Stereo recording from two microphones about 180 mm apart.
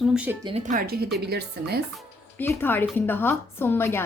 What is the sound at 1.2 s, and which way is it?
Speech, 65° right (ahead or behind).